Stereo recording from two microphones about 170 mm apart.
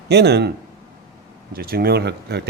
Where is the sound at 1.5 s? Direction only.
60° right (ahead or behind).